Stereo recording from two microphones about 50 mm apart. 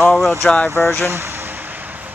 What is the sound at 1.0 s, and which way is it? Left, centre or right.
Speech, right.